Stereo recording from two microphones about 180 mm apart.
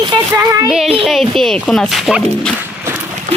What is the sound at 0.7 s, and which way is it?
Speech, centre (ahead or behind).